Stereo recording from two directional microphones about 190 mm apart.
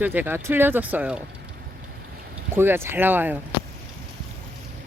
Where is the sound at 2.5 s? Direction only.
10° right (ahead or behind).